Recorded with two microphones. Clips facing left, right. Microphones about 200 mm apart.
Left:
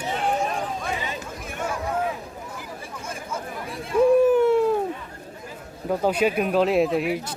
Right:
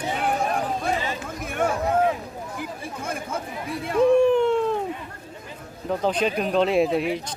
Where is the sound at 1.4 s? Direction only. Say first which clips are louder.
Right 8 dB; 55° right (ahead or behind).